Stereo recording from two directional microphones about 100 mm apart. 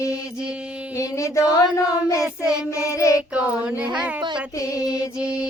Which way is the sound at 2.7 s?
35° left (ahead or behind).